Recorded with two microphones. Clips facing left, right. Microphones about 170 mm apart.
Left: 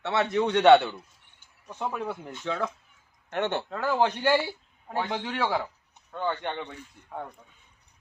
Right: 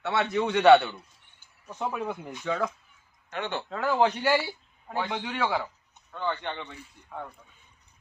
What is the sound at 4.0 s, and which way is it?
Speech, 10° right (ahead or behind).